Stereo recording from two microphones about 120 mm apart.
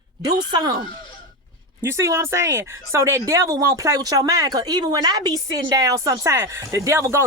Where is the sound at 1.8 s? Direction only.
25° right (ahead or behind).